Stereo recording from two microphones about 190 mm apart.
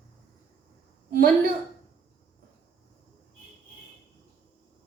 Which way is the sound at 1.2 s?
50° right (ahead or behind).